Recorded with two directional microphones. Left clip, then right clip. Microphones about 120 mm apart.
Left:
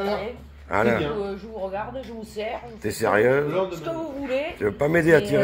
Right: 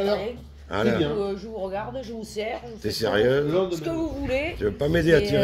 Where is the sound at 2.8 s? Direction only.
15° right (ahead or behind).